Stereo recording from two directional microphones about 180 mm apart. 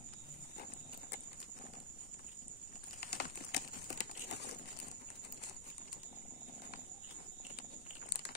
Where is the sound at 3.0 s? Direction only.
60° left (ahead or behind).